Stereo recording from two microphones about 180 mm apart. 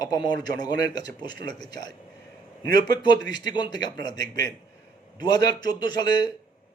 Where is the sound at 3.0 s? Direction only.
25° left (ahead or behind).